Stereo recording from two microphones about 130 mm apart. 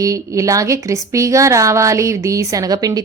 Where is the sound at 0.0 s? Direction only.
25° right (ahead or behind).